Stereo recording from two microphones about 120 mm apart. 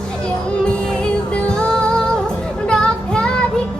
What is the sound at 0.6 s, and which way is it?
Music, 5° left (ahead or behind).